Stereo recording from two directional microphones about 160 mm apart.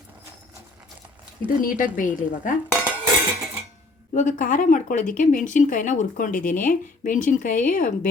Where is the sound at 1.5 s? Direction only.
60° left (ahead or behind).